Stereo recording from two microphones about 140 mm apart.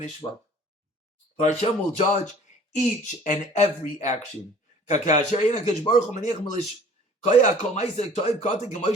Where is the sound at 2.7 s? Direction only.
60° left (ahead or behind).